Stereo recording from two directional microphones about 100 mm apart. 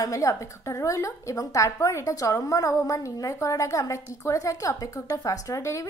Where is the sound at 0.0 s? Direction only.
30° left (ahead or behind).